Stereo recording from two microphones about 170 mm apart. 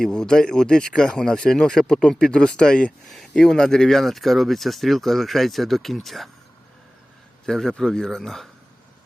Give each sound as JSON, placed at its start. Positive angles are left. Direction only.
{"t": 0.0, "sound": "speech", "side_deg": 5}
{"t": 7.4, "sound": "speech", "side_deg": 5}